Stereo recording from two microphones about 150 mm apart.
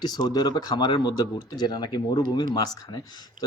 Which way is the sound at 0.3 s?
25° left (ahead or behind).